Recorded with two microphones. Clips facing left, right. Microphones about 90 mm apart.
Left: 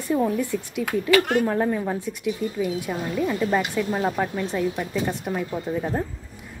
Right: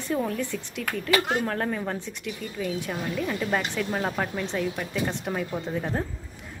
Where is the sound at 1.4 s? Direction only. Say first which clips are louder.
Left 5 dB; 10° left (ahead or behind).